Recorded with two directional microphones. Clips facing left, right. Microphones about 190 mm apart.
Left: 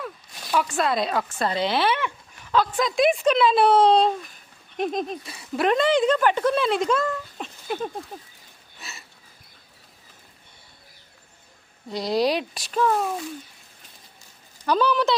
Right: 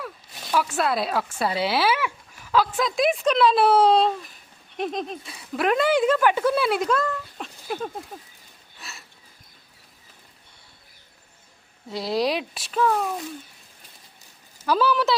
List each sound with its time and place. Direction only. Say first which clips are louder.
0.0 s speech: left 1 dB; centre (ahead or behind)
8.8 s a sound: left 1 dB; centre (ahead or behind)
11.9 s speech: left 2 dB; 5° right (ahead or behind)
14.6 s speech: even; 5° right (ahead or behind)